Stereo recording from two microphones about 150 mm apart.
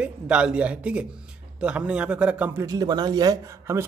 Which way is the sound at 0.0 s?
5° right (ahead or behind).